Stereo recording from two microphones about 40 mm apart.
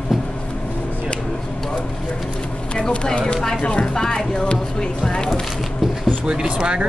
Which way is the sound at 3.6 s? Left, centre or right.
Left.